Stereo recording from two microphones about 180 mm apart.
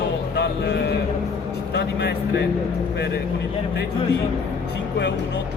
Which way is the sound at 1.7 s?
65° left (ahead or behind).